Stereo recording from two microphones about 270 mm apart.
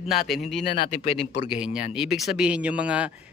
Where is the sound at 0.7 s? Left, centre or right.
Left.